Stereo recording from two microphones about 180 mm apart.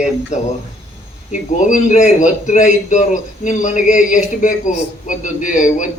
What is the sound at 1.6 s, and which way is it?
A man's voice, 45° left (ahead or behind).